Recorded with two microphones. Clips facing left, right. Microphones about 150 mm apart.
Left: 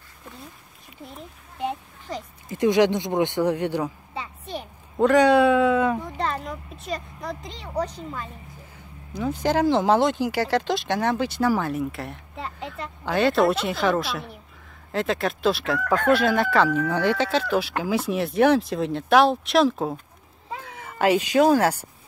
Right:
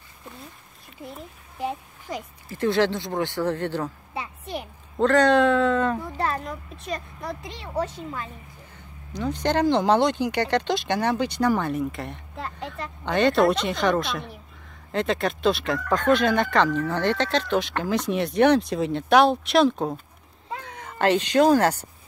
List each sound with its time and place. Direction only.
1.1 s a child's voice: centre (ahead or behind)
2.4 s speech: 15° left (ahead or behind)
4.1 s a sound: 10° right (ahead or behind)
4.9 s speech: 10° left (ahead or behind)